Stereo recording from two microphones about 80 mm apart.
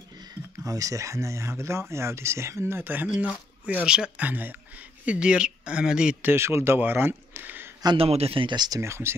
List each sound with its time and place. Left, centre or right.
0.2 s speech: right
3.6 s speech: centre
4.3 s speech: right
6.2 s speech: right
7.8 s speech: right
8.6 s speech: right